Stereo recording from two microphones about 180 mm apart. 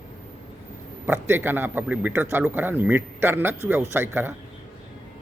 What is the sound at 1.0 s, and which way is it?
Speech, 10° right (ahead or behind).